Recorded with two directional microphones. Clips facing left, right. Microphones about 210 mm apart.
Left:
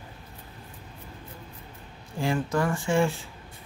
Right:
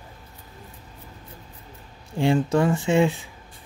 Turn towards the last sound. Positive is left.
turn(degrees=-20)  # may be behind; listen again after turning